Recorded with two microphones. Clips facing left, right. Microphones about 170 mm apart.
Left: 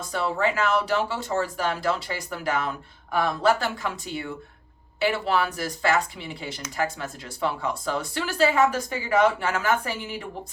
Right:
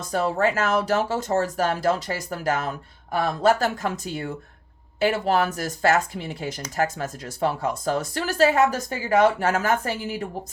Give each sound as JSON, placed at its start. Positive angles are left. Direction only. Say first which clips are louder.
{"t": 0.1, "sound": "speech", "louder": "right 3 dB", "side_deg": -45}